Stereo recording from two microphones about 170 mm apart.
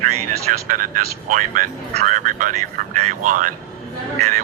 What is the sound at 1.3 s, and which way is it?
Speech, 50° right (ahead or behind).